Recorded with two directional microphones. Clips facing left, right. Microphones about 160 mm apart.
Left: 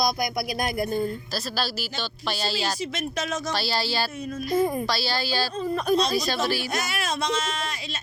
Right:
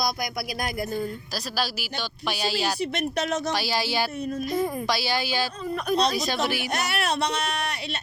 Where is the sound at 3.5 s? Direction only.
15° right (ahead or behind).